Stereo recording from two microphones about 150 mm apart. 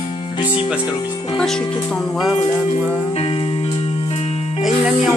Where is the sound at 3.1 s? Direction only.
40° left (ahead or behind).